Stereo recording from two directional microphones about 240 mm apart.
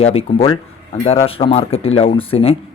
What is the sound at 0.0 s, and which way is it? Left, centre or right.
Speech, left.